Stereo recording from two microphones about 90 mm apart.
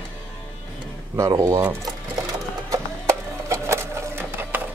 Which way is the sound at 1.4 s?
30° right (ahead or behind).